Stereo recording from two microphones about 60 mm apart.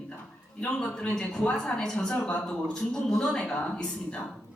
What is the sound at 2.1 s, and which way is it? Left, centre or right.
Speech, left.